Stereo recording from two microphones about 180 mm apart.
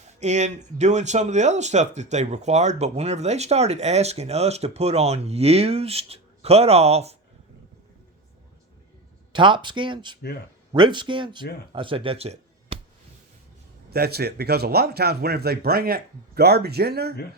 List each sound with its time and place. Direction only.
0.2 s speech: 40° right (ahead or behind)
9.3 s speech: 25° right (ahead or behind)
13.9 s speech: 60° right (ahead or behind)